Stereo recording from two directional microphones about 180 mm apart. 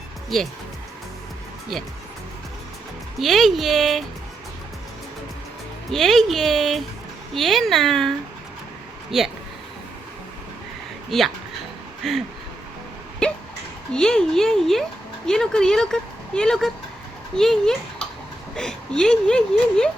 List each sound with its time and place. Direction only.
1.7 s speech: centre (ahead or behind)
3.2 s speech: centre (ahead or behind)
5.9 s speech: centre (ahead or behind)
11.1 s speech: centre (ahead or behind)
13.2 s hiccup: 5° left (ahead or behind)
13.9 s a child's voice: 5° left (ahead or behind)